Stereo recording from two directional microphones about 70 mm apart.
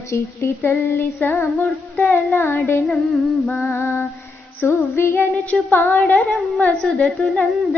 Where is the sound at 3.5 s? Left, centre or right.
Left.